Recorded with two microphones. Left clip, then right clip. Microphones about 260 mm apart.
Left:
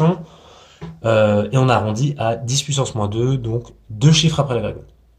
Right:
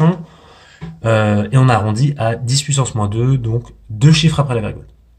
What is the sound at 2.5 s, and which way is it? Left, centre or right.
Speech, right.